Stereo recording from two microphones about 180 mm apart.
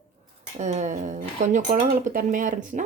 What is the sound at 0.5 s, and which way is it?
Speech, 40° right (ahead or behind).